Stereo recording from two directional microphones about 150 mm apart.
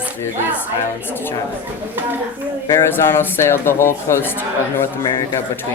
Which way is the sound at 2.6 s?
15° left (ahead or behind).